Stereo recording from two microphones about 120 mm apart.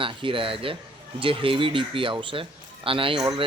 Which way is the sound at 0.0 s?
45° right (ahead or behind).